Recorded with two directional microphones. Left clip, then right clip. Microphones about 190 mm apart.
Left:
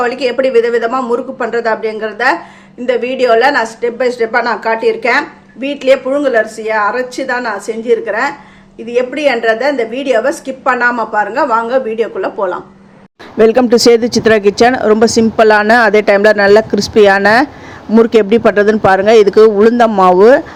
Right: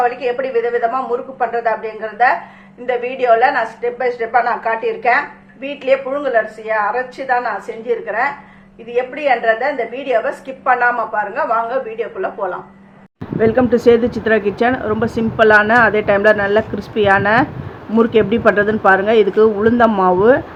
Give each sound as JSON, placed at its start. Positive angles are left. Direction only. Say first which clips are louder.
{"t": 0.0, "sound": "a woman's voice", "louder": "left 4 dB", "side_deg": 55}